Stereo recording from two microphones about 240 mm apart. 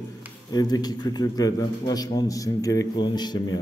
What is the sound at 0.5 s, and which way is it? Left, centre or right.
A man's voice, centre.